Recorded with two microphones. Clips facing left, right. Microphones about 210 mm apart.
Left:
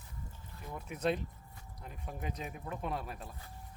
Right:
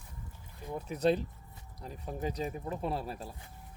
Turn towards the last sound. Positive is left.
turn(degrees=-30)  # may be behind; listen again after turning